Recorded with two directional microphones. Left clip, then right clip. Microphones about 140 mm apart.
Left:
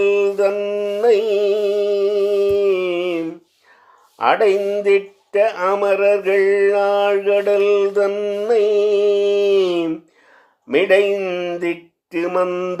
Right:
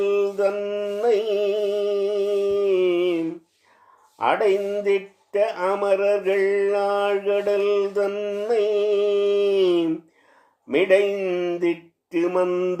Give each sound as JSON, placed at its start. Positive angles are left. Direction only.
{"t": 0.0, "sound": "music", "side_deg": 25}
{"t": 4.2, "sound": "speech", "side_deg": 25}